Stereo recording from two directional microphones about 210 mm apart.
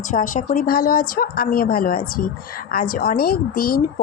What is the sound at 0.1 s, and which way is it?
Speech, 40° left (ahead or behind).